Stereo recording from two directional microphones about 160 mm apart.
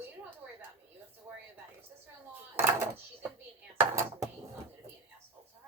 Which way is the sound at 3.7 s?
15° right (ahead or behind).